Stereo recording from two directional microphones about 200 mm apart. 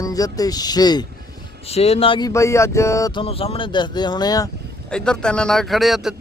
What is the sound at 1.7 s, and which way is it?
Speech, 30° left (ahead or behind).